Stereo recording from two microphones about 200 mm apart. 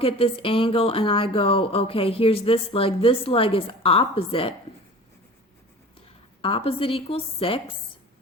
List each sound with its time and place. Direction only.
0.0 s speech: 25° left (ahead or behind)
6.4 s speech: 25° left (ahead or behind)